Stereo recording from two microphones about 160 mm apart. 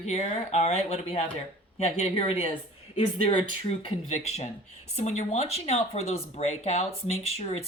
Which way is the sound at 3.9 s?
40° left (ahead or behind).